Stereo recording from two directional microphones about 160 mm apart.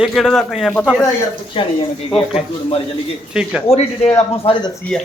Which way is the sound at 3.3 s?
5° right (ahead or behind).